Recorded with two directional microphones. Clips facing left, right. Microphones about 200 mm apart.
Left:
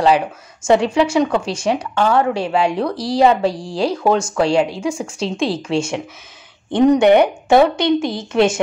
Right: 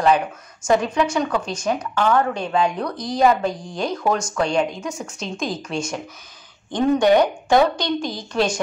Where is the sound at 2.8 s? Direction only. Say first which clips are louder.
Left 4 dB; 30° left (ahead or behind).